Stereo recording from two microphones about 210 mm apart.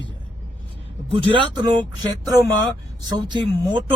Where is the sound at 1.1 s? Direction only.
25° right (ahead or behind).